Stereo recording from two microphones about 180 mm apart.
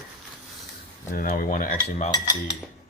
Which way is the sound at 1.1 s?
50° left (ahead or behind).